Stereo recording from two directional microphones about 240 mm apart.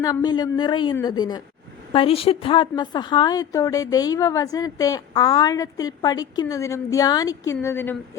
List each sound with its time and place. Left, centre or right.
0.0 s a woman's voice: centre